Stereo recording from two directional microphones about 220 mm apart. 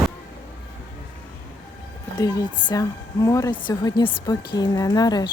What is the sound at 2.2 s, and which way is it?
A woman's voice, 15° left (ahead or behind).